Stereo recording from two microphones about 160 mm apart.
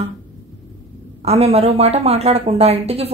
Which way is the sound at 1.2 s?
40° right (ahead or behind).